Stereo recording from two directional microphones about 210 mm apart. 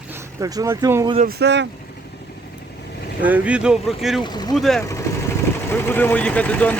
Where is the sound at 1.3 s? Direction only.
55° right (ahead or behind).